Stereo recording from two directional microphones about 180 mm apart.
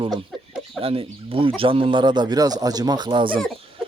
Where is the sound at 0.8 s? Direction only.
30° right (ahead or behind).